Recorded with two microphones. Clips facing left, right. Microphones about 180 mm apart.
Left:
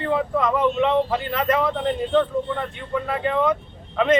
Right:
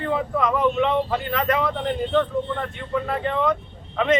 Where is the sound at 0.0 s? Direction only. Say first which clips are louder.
Left 1 dB; centre (ahead or behind).